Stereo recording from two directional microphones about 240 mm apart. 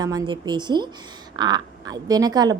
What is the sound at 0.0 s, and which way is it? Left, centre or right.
A woman's voice, centre.